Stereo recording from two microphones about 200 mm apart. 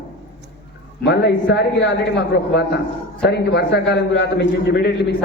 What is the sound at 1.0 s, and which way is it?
Speech, 60° left (ahead or behind).